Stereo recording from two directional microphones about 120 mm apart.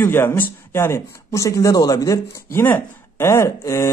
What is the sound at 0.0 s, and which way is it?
Speech, 20° left (ahead or behind).